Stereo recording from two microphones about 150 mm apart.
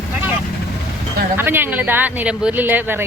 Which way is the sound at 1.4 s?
15° right (ahead or behind).